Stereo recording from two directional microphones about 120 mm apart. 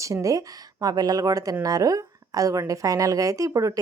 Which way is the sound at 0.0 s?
25° right (ahead or behind).